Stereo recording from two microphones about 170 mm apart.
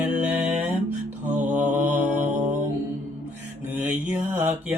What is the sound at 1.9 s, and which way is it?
Mantra, 45° right (ahead or behind).